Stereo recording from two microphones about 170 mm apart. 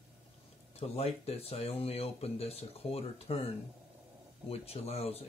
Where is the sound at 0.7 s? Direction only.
35° left (ahead or behind).